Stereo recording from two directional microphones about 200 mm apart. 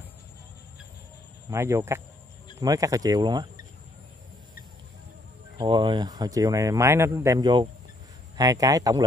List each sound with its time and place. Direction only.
1.5 s speech: 15° right (ahead or behind)
5.6 s speech: 25° right (ahead or behind)